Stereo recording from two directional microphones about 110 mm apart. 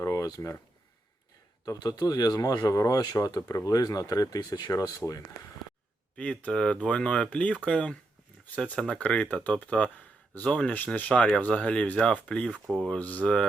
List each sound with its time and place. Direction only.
0.0 s a sound: 30° left (ahead or behind)
1.6 s speech: 35° left (ahead or behind)
6.1 s speech: 10° left (ahead or behind)
12.5 s speech: 5° right (ahead or behind)
12.8 s speech: 10° left (ahead or behind)